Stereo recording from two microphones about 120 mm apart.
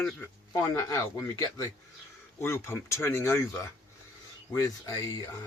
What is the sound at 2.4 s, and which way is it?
Speech, 20° left (ahead or behind).